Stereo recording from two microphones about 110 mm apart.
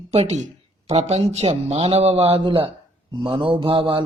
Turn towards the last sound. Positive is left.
turn(degrees=-50)  # may be behind; listen again after turning